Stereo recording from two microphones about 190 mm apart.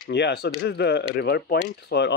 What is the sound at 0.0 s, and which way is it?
Speech, 65° left (ahead or behind).